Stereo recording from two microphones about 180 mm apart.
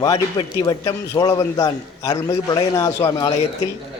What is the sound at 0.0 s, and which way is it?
A man's voice, 20° left (ahead or behind).